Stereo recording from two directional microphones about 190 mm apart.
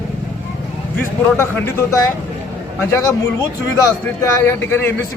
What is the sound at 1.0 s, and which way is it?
Speech, 15° left (ahead or behind).